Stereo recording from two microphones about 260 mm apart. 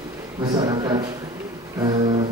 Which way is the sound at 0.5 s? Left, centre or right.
Centre.